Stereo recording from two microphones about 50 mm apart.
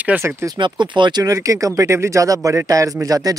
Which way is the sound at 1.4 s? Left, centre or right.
Right.